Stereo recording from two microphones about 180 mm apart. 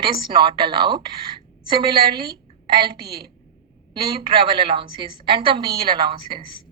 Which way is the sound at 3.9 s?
30° right (ahead or behind).